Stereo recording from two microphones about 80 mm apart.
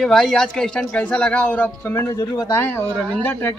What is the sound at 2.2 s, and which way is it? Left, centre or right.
Speech, left.